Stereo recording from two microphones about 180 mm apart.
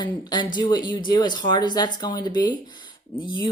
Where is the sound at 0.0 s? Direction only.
25° left (ahead or behind).